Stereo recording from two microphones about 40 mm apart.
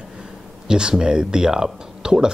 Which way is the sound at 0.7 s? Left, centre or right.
Centre.